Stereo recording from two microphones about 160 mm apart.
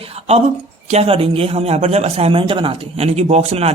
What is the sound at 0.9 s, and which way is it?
A man's voice, 40° right (ahead or behind).